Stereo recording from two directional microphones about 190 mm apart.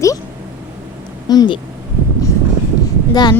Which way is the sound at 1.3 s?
25° left (ahead or behind).